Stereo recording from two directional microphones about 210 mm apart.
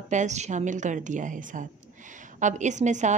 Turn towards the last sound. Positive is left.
turn(degrees=-35)  # may be behind; listen again after turning